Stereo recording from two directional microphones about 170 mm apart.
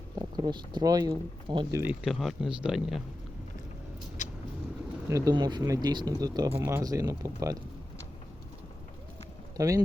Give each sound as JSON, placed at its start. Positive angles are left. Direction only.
{"t": 0.2, "sound": "speech", "side_deg": -25}
{"t": 1.8, "sound": "speech", "side_deg": -5}
{"t": 4.2, "sound": "vehicle", "side_deg": 45}
{"t": 5.0, "sound": "speech", "side_deg": -20}
{"t": 9.6, "sound": "speech", "side_deg": -20}